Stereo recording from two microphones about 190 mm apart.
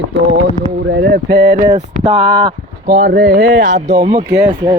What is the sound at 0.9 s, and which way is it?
Speech, 60° right (ahead or behind).